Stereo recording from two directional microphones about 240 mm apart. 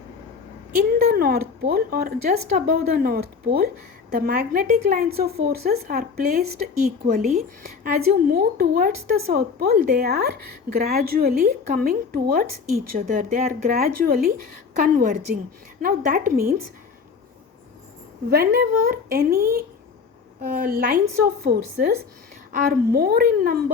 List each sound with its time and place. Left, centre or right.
0.8 s a woman's voice: right
18.3 s a woman's voice: right